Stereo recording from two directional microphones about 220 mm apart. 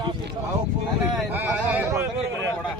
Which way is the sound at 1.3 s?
10° right (ahead or behind).